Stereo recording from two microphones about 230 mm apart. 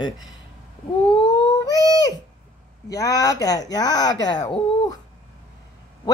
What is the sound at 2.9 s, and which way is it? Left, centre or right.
A woman's voice, centre.